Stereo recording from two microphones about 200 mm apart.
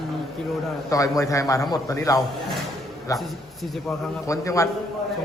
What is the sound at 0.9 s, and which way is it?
A man's voice, 15° left (ahead or behind).